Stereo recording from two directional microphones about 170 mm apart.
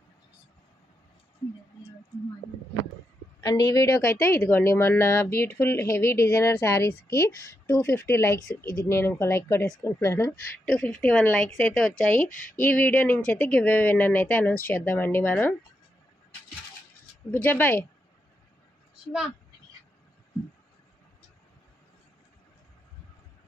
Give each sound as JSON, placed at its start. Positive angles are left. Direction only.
{"t": 3.3, "sound": "speech", "side_deg": 20}
{"t": 17.3, "sound": "speech", "side_deg": 10}